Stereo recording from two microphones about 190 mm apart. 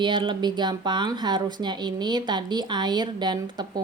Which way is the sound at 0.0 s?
25° right (ahead or behind).